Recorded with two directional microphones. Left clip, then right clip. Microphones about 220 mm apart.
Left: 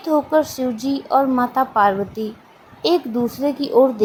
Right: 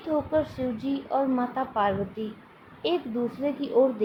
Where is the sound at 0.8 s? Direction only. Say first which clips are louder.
Left 10 dB; 25° left (ahead or behind).